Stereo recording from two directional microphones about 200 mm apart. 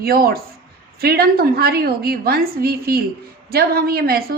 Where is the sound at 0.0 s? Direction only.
50° right (ahead or behind).